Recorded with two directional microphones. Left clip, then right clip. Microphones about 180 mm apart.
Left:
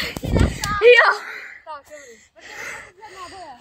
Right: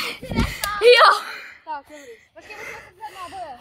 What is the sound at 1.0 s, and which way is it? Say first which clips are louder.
Wail: right 1 dB; centre (ahead or behind).